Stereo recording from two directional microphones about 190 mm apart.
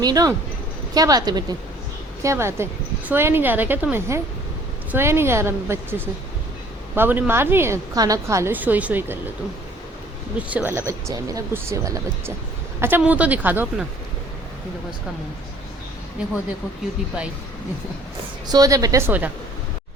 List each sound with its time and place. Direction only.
0.0 s a woman's voice: 20° right (ahead or behind)
10.3 s a woman's voice: 10° right (ahead or behind)
18.4 s a woman's voice: 20° right (ahead or behind)